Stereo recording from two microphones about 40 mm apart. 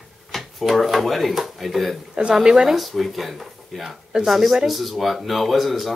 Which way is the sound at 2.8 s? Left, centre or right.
Centre.